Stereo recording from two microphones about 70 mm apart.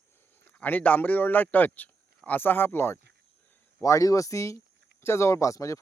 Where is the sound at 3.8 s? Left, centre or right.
Left.